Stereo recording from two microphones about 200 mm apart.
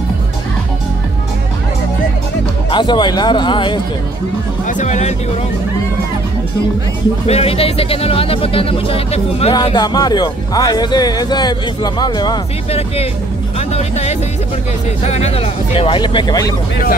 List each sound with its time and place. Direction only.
2.7 s speech: 20° left (ahead or behind)
4.6 s speech: 40° left (ahead or behind)
7.2 s speech: 30° left (ahead or behind)